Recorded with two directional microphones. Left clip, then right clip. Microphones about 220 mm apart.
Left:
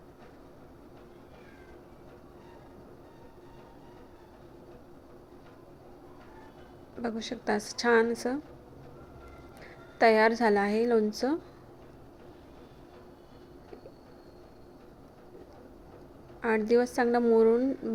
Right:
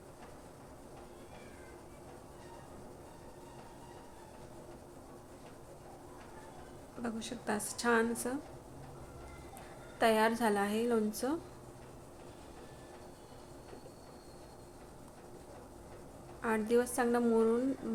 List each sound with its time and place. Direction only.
7.0 s a woman's voice: 25° left (ahead or behind)
10.0 s a woman's voice: 25° left (ahead or behind)
16.4 s a woman's voice: 20° left (ahead or behind)